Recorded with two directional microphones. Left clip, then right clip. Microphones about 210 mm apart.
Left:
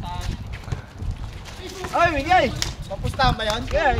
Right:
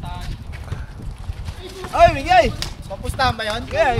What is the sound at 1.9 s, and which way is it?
Speech, 45° right (ahead or behind).